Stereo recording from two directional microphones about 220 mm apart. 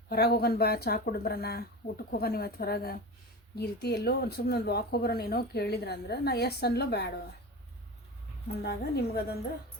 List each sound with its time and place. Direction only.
0.1 s speech: 45° left (ahead or behind)
8.6 s speech: 45° left (ahead or behind)